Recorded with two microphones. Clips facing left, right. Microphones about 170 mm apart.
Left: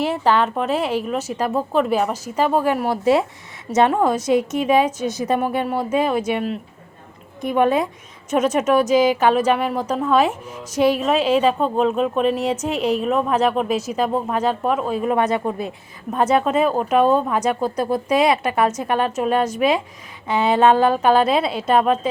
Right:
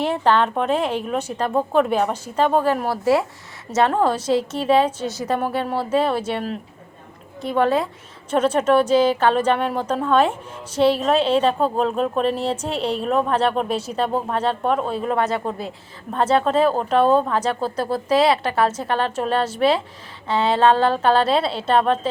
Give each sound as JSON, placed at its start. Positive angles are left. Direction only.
{"t": 0.0, "sound": "a woman's voice", "side_deg": 5}
{"t": 7.4, "sound": "a woman's voice", "side_deg": 15}
{"t": 10.8, "sound": "a woman's voice", "side_deg": -30}
{"t": 11.0, "sound": "a woman's voice", "side_deg": 5}
{"t": 12.4, "sound": "a woman's voice", "side_deg": -30}
{"t": 13.0, "sound": "a woman's voice", "side_deg": 5}
{"t": 14.9, "sound": "a woman's voice", "side_deg": 15}